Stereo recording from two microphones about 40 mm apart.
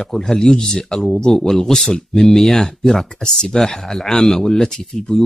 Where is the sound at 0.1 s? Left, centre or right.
Centre.